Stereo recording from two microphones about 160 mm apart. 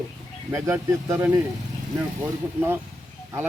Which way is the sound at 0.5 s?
15° right (ahead or behind).